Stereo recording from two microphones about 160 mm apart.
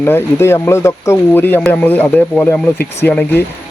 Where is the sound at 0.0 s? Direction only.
15° left (ahead or behind).